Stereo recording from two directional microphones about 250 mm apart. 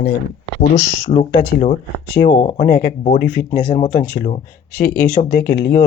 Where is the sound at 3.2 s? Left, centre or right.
Left.